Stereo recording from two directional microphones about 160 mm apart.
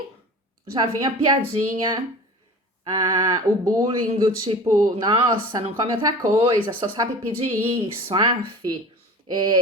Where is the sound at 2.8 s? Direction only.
25° right (ahead or behind).